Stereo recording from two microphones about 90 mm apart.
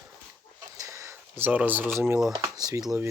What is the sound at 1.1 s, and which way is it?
Speech, 20° right (ahead or behind).